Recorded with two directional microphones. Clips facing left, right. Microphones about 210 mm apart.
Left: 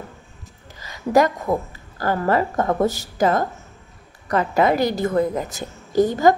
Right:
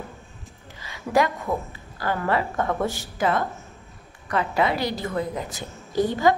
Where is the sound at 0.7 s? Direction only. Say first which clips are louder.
Left 5 dB; 40° left (ahead or behind).